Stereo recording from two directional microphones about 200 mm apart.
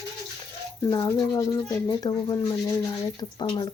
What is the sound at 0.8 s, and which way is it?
Speech, 15° left (ahead or behind).